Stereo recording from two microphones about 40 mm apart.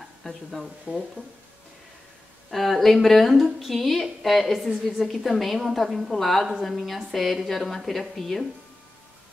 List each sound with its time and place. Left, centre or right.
0.2 s speech: centre
0.9 s speech: right
2.5 s a woman's voice: centre